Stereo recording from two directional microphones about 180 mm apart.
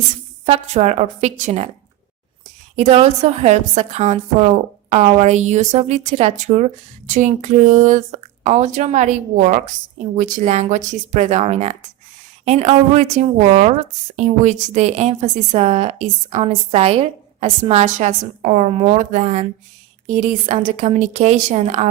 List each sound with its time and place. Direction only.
0.4 s a woman's voice: 35° right (ahead or behind)
2.7 s a woman's voice: 35° right (ahead or behind)